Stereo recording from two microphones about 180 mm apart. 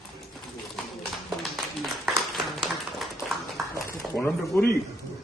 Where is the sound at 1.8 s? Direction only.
Centre (ahead or behind).